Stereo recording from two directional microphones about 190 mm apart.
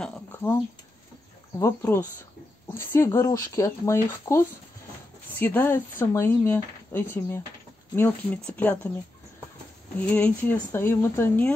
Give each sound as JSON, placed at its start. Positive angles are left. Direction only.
{"t": 0.0, "sound": "a sound", "side_deg": 10}
{"t": 1.6, "sound": "speech", "side_deg": 15}
{"t": 9.9, "sound": "speech", "side_deg": 10}